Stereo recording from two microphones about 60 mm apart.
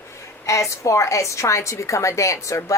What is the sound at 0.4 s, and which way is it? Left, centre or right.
Speech, left.